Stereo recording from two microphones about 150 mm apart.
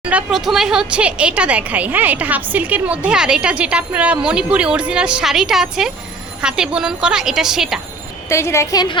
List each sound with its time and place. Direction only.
0.0 s a woman's voice: 10° right (ahead or behind)
8.3 s speech: 20° left (ahead or behind)